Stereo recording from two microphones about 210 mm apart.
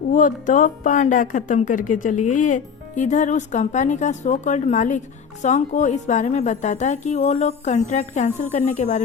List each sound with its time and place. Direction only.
0.1 s a woman's voice: 40° left (ahead or behind)
2.1 s speech: 90° left
2.4 s a woman's voice: 35° left (ahead or behind)